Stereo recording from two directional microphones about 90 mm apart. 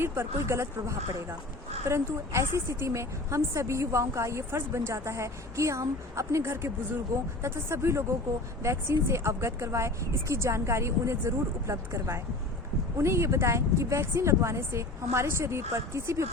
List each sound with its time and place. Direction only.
0.0 s a woman's voice: 30° right (ahead or behind)